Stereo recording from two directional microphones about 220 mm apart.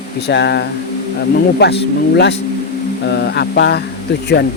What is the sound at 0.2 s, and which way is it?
Speech, 50° left (ahead or behind).